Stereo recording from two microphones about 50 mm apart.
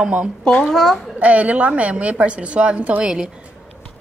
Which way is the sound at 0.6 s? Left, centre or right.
Centre.